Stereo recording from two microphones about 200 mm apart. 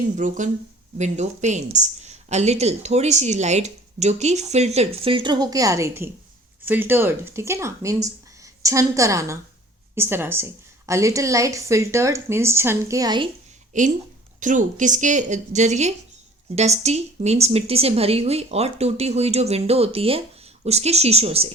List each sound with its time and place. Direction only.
0.2 s a woman's voice: 40° right (ahead or behind); by 13.2 s 20° right (ahead or behind)
13.7 s speech: 40° right (ahead or behind)